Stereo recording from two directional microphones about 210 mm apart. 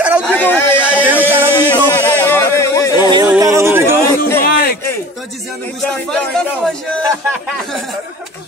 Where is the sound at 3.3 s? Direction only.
15° right (ahead or behind).